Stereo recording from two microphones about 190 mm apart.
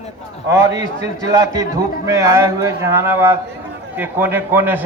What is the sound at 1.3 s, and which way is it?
A man's voice, 15° right (ahead or behind).